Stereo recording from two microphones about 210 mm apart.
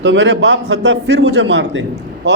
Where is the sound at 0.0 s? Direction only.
60° right (ahead or behind).